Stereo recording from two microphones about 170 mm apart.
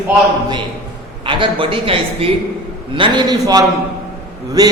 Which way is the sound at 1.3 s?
30° right (ahead or behind).